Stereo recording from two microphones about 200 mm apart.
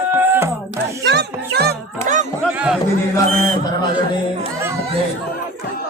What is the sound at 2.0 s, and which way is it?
Music, 40° right (ahead or behind).